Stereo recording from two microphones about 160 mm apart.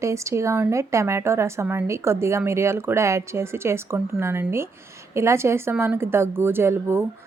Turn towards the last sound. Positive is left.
turn(degrees=-15)  # may be behind; listen again after turning